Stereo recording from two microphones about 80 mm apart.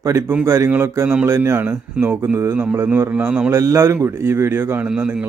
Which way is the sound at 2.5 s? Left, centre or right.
Right.